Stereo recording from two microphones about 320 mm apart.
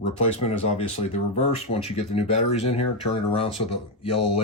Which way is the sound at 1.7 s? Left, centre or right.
Centre.